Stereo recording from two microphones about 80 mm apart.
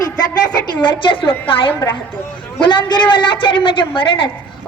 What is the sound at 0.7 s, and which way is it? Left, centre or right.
A child's voice, left.